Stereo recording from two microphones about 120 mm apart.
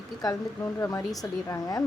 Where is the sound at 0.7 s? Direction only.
20° left (ahead or behind).